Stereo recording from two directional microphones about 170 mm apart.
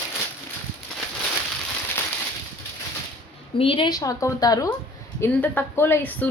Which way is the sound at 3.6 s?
30° left (ahead or behind).